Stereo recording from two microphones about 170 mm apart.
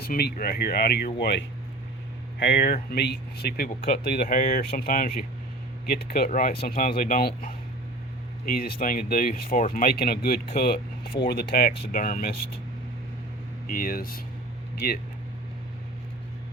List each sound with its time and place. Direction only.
0.0 s speech: 65° left (ahead or behind)
11.8 s speech: 55° left (ahead or behind)
13.7 s speech: 55° left (ahead or behind)